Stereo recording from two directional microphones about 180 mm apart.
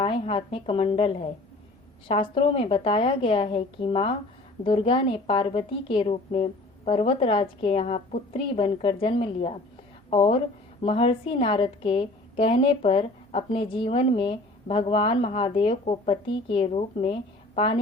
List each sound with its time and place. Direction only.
0.0 s a woman's voice: 30° left (ahead or behind)